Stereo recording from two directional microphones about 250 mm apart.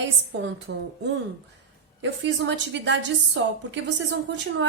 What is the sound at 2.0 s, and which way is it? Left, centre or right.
A woman's voice, right.